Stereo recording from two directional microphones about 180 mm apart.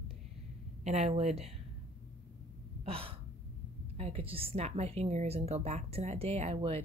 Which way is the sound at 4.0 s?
30° right (ahead or behind).